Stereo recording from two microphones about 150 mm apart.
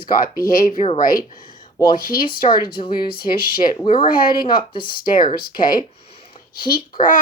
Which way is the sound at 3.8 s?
35° left (ahead or behind).